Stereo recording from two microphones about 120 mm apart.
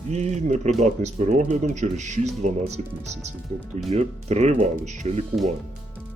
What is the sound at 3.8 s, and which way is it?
Speech, 65° right (ahead or behind).